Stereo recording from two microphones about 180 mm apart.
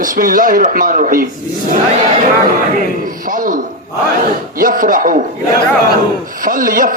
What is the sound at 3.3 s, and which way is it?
Speech, 50° right (ahead or behind).